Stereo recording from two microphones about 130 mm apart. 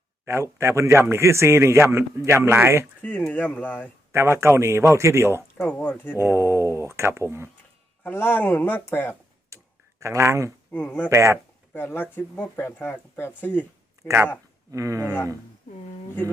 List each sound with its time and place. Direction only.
0.3 s a man's voice: 20° right (ahead or behind)
3.0 s speech: 10° left (ahead or behind)
4.1 s a man's voice: 20° right (ahead or behind)
5.5 s speech: 10° left (ahead or behind)
6.1 s a man's voice: 20° right (ahead or behind)
8.0 s speech: 15° left (ahead or behind)
9.5 s tick-tock: 20° right (ahead or behind)
10.0 s a man's voice: 20° right (ahead or behind)
10.7 s speech: 15° left (ahead or behind)
11.1 s a man's voice: 20° right (ahead or behind)
11.7 s speech: 15° left (ahead or behind)
14.7 s a man's voice: 25° right (ahead or behind)